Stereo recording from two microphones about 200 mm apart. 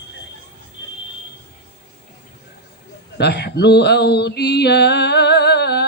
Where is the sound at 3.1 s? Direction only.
55° left (ahead or behind).